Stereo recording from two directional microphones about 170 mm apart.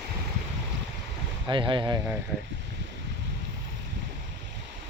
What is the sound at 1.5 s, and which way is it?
Speech, 30° right (ahead or behind).